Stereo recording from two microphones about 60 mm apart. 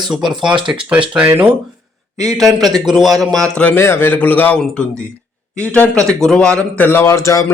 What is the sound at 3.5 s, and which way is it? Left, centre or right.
Speech, left.